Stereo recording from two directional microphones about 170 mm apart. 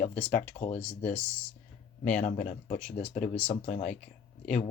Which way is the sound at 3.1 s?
45° left (ahead or behind).